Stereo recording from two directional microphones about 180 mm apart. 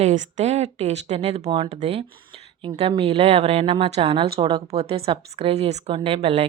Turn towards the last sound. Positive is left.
turn(degrees=-35)  # may be behind; listen again after turning